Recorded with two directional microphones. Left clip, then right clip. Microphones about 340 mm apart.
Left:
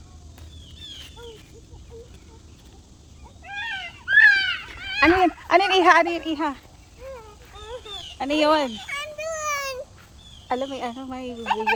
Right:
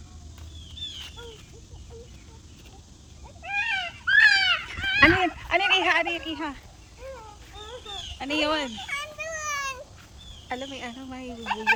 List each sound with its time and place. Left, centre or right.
3.4 s cat: centre
4.7 s speech: centre
7.5 s a sound: centre
10.5 s speech: centre